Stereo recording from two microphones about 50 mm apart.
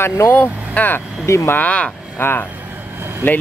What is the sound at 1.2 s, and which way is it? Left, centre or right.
Speech, left.